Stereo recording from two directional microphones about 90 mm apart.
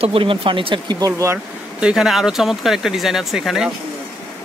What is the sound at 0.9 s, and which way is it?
Speech, 35° right (ahead or behind).